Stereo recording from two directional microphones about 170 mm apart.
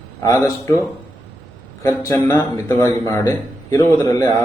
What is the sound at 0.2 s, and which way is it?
A man's voice, 20° left (ahead or behind).